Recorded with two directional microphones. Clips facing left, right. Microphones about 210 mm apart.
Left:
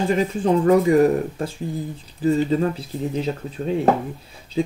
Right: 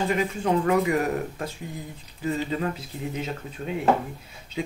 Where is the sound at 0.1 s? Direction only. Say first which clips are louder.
Left 5 dB; 30° left (ahead or behind).